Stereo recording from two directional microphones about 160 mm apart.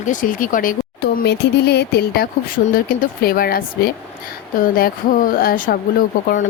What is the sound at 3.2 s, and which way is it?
Speech, 65° left (ahead or behind).